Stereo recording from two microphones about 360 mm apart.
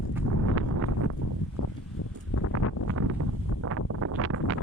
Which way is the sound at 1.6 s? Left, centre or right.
Left.